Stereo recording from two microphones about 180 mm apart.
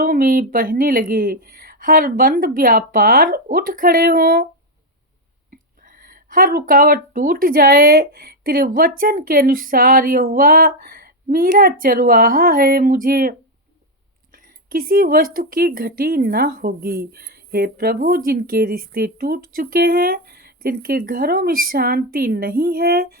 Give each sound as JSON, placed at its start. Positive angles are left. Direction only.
{"t": 0.0, "sound": "a woman's voice", "side_deg": -55}
{"t": 5.5, "sound": "a woman's voice", "side_deg": -50}
{"t": 14.7, "sound": "speech", "side_deg": -55}